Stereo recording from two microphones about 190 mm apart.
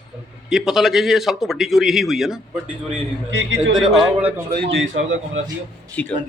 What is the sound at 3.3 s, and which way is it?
Speech, 75° right (ahead or behind).